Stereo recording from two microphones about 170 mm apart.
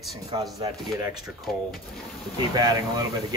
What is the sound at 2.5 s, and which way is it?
Speech, 25° right (ahead or behind).